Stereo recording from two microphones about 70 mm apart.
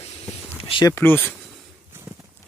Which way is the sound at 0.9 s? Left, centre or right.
Left.